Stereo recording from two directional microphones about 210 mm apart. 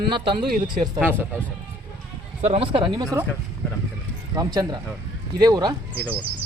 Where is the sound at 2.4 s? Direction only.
25° right (ahead or behind).